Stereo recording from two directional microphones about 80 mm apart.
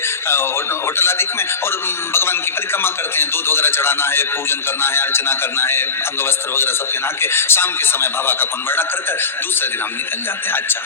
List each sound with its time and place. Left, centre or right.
0.9 s a man's voice: left